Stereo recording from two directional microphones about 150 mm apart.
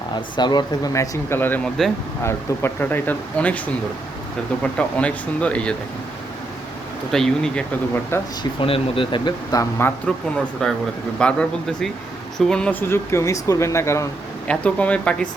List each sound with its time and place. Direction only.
0.3 s speech: 30° left (ahead or behind); by 3.6 s 10° left (ahead or behind)
4.6 s speech: 10° left (ahead or behind)
7.1 s speech: 5° left (ahead or behind)
8.1 s speech: 15° left (ahead or behind)
8.6 s speech: 35° left (ahead or behind); by 9.9 s 20° left (ahead or behind)
10.3 s speech: 5° left (ahead or behind)
12.9 s speech: 20° left (ahead or behind)